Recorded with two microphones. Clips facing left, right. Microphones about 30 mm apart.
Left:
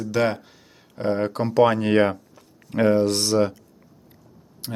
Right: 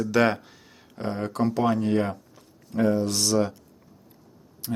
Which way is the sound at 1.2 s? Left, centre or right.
Left.